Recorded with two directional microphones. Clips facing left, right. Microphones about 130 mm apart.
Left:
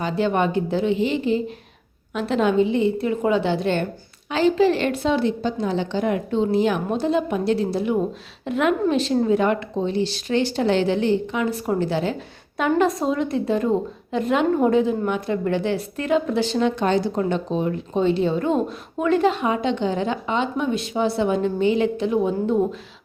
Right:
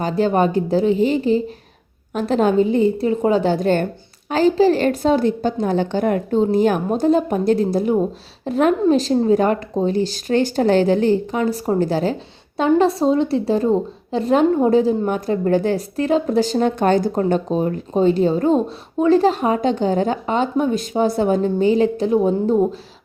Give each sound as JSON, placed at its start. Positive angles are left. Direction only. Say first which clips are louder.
{"t": 0.0, "sound": "a woman's voice", "louder": "right 4 dB", "side_deg": -40}